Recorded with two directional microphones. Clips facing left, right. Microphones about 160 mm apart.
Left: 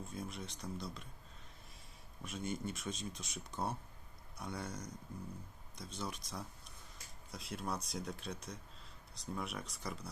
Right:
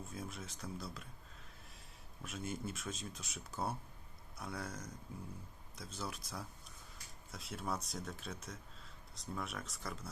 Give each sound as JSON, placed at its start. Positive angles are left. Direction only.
{"t": 0.1, "sound": "speech", "side_deg": -5}
{"t": 2.2, "sound": "speech", "side_deg": 0}